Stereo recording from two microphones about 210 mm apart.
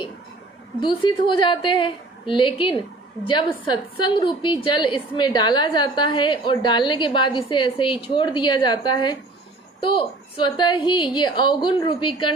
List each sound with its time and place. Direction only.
0.8 s a woman's voice: 20° left (ahead or behind)
4.0 s a woman's voice: 25° left (ahead or behind)